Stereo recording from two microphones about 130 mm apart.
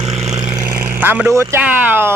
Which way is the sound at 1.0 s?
15° right (ahead or behind).